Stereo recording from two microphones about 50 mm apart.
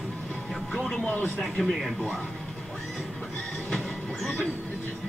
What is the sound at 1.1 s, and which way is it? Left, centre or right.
Speech, left.